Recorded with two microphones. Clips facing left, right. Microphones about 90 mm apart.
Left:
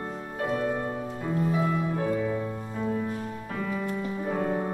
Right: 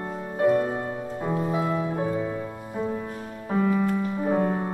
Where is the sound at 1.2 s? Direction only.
25° right (ahead or behind).